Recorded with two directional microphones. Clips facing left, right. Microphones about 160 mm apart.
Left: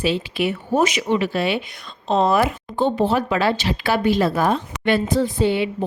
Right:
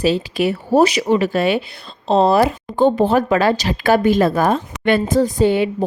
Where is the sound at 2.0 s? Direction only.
35° right (ahead or behind).